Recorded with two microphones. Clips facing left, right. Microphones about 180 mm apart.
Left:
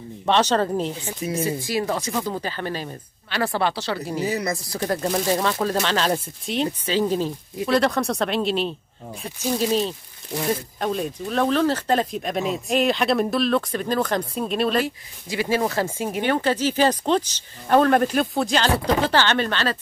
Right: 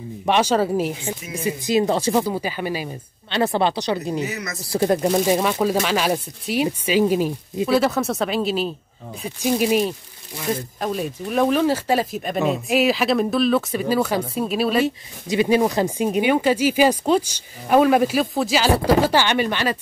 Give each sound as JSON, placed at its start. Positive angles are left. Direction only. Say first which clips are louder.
{"t": 0.2, "sound": "speech", "louder": "right 1 dB", "side_deg": -10}
{"t": 1.4, "sound": "speech", "louder": "right 7 dB", "side_deg": -20}
{"t": 2.2, "sound": "speech", "louder": "right 3 dB", "side_deg": -10}
{"t": 3.3, "sound": "speech", "louder": "right 3 dB", "side_deg": -20}
{"t": 4.2, "sound": "speech", "louder": "left 3 dB", "side_deg": 30}
{"t": 4.6, "sound": "speech", "louder": "right 6 dB", "side_deg": -25}
{"t": 9.4, "sound": "speech", "louder": "right 3 dB", "side_deg": -15}
{"t": 14.8, "sound": "speech", "louder": "right 4 dB", "side_deg": -20}